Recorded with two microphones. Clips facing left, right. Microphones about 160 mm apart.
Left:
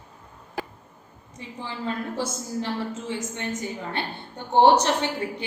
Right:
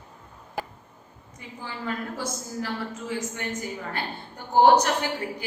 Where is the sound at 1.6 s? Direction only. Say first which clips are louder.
Left 2 dB; 25° left (ahead or behind).